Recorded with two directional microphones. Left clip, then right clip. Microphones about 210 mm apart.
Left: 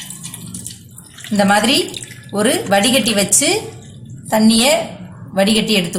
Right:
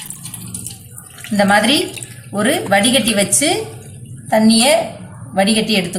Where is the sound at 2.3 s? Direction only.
25° left (ahead or behind).